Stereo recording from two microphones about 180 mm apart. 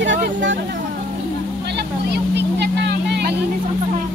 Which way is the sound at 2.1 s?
70° right (ahead or behind).